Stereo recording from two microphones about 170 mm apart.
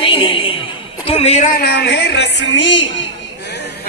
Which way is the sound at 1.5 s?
70° left (ahead or behind).